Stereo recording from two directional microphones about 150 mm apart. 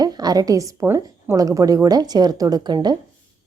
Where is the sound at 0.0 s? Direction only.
25° right (ahead or behind).